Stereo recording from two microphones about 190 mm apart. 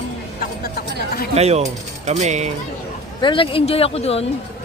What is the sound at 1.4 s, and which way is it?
Speech, 35° right (ahead or behind).